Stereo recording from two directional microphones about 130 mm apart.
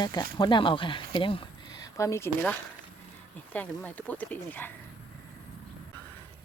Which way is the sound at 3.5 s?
10° left (ahead or behind).